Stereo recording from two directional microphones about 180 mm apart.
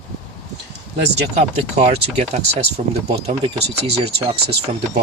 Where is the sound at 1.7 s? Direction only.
35° right (ahead or behind).